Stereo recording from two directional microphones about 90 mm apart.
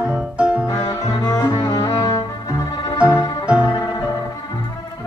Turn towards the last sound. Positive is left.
turn(degrees=45)  # may be behind; listen again after turning